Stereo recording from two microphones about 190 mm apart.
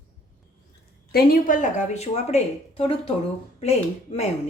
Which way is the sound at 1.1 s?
45° left (ahead or behind).